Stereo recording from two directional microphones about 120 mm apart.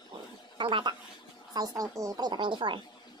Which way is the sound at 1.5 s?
30° right (ahead or behind).